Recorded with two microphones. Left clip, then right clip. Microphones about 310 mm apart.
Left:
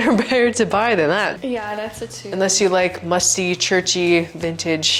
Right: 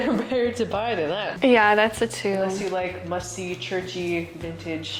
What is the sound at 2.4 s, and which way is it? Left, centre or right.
A woman's voice, left.